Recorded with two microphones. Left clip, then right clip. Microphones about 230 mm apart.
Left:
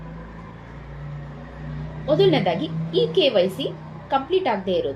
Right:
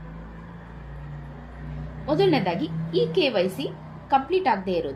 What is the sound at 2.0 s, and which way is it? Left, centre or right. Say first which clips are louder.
A woman's voice: left 3 dB; right.